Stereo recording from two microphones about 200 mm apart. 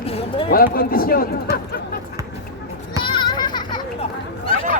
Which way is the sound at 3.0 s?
25° left (ahead or behind).